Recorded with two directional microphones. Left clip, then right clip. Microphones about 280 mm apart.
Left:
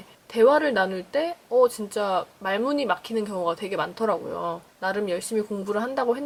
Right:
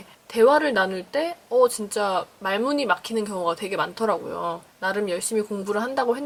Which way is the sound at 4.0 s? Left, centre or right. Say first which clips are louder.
Left 1 dB; centre.